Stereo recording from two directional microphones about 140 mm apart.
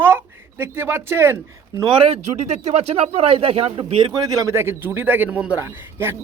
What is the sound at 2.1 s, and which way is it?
Speech, 55° right (ahead or behind).